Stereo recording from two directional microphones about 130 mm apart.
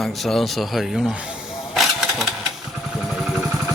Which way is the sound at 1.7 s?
Centre (ahead or behind).